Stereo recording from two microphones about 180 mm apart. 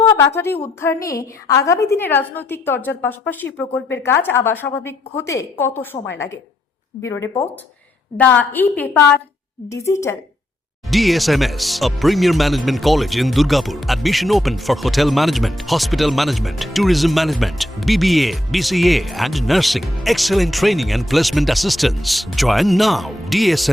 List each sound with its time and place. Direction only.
0.0 s a woman's voice: 15° left (ahead or behind)
7.0 s a woman's voice: 15° left (ahead or behind)
10.8 s speech: centre (ahead or behind)